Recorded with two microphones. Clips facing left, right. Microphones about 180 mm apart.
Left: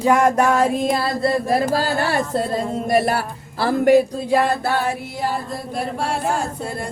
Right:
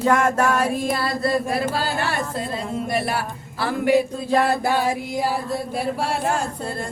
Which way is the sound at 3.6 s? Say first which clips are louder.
Left 5 dB; 45° left (ahead or behind).